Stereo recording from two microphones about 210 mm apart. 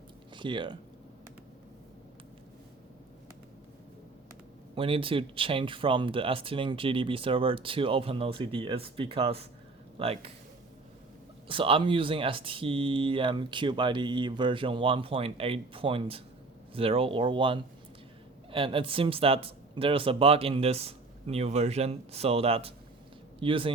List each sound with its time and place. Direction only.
0.3 s speech: 25° right (ahead or behind)
4.7 s speech: 25° right (ahead or behind)
11.4 s speech: 25° right (ahead or behind)